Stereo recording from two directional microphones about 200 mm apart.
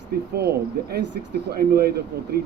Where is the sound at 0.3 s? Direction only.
55° right (ahead or behind).